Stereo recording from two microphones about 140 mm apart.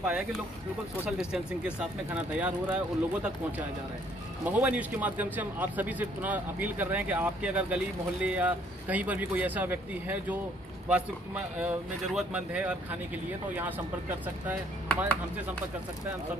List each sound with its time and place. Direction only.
0.0 s a man's voice: 5° right (ahead or behind)